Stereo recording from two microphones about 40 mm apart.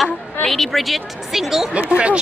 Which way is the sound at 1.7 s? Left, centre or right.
Right.